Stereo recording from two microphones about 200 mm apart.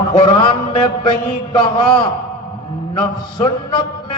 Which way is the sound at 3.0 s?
25° left (ahead or behind).